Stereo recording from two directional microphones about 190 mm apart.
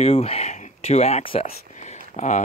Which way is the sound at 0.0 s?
30° left (ahead or behind).